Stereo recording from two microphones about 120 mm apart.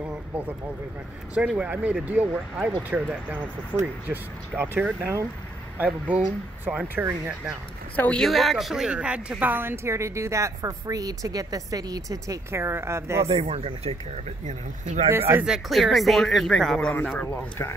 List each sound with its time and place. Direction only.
1.3 s speech: 10° right (ahead or behind)
7.9 s a woman's voice: 10° left (ahead or behind); by 13.3 s 25° right (ahead or behind)
13.3 s speech: 55° right (ahead or behind)
14.4 s speech: 70° right (ahead or behind)
15.0 s a woman's voice: 20° right (ahead or behind)
15.4 s speech: centre (ahead or behind)
16.9 s speech: 15° left (ahead or behind)